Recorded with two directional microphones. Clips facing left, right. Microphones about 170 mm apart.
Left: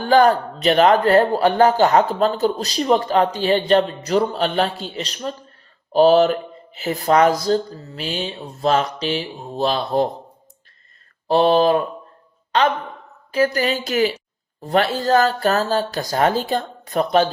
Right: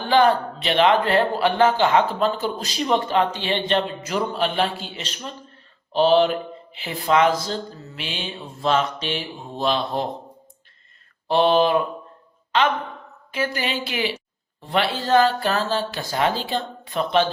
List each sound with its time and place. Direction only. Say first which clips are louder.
0.0 s speech: left 3 dB; 45° left (ahead or behind)
11.3 s a man's voice: left 3 dB; 35° left (ahead or behind)